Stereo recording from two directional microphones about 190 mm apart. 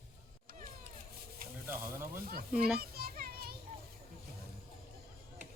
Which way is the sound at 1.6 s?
10° right (ahead or behind).